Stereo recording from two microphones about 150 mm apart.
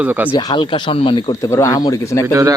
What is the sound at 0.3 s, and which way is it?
Speech, 30° left (ahead or behind).